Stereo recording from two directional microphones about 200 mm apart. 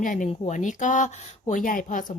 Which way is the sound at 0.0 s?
40° left (ahead or behind).